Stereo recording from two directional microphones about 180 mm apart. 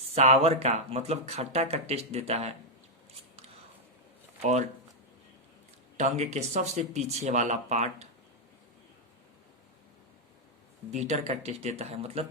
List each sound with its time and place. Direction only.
0.1 s speech: 35° right (ahead or behind)
6.0 s speech: 40° right (ahead or behind)
10.9 s speech: 35° right (ahead or behind)